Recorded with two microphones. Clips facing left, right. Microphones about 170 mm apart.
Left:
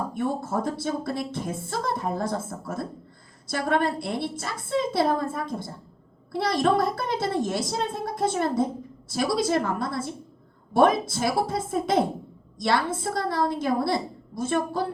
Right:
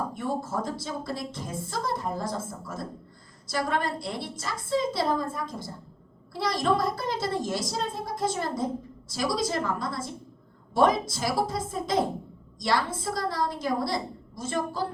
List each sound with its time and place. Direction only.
0.1 s speech: 60° left (ahead or behind)